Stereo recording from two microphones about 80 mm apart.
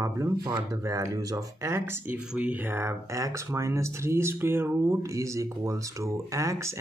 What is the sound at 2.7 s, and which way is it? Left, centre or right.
Speech, right.